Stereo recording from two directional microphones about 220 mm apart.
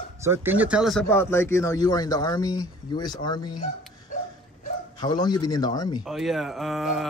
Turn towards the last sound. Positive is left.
turn(degrees=0)  # may be behind; listen again after turning